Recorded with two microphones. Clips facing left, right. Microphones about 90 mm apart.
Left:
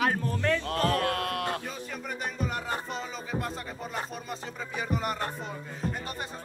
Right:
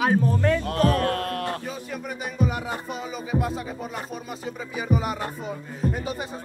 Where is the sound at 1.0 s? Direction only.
40° right (ahead or behind).